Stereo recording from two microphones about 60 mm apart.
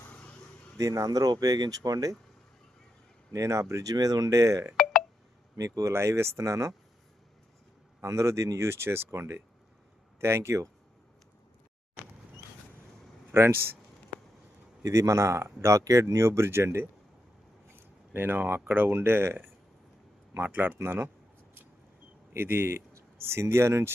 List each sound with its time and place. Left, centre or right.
0.8 s speech: right
3.3 s speech: right
5.9 s speech: right
8.0 s speech: right
13.3 s speech: right
14.8 s speech: right
15.8 s speech: right
22.3 s speech: right